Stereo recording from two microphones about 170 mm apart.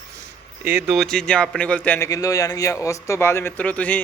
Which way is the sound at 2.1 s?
20° left (ahead or behind).